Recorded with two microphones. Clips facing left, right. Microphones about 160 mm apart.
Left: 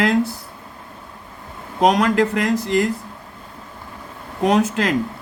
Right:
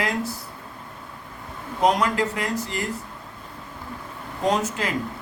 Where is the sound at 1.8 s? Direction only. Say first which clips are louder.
Left 5 dB; 90° left.